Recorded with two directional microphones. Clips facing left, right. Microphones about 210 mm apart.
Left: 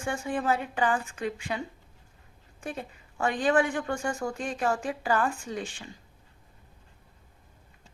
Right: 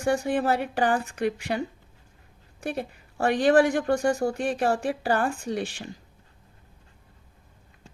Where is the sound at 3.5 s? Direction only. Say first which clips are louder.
Right 6 dB; 40° right (ahead or behind).